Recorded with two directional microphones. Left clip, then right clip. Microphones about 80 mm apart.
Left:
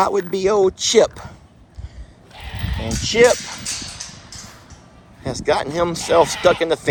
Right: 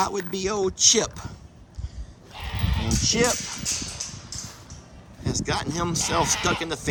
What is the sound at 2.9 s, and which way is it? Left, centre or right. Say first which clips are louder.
Speech: left 9 dB; right.